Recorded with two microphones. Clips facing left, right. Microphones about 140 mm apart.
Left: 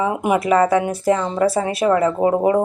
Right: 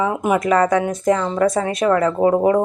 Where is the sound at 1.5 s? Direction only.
25° left (ahead or behind).